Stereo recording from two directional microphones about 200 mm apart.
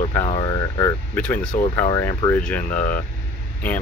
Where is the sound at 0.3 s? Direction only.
20° left (ahead or behind).